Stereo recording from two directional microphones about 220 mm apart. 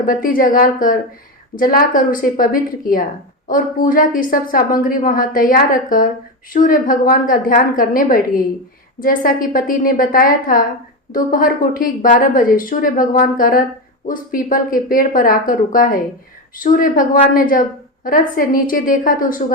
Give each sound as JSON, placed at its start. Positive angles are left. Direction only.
{"t": 0.0, "sound": "a woman's voice", "side_deg": 40}